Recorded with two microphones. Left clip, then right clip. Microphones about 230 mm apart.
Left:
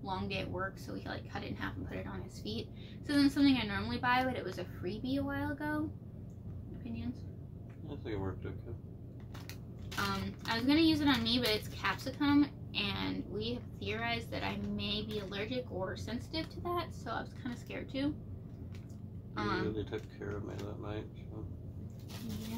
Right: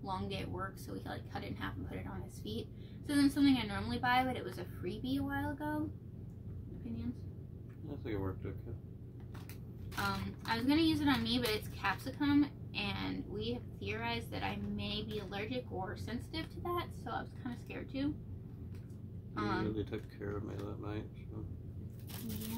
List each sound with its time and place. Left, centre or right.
0.0 s a woman's voice: centre
9.9 s a woman's voice: centre
19.3 s speech: centre
19.9 s speech: right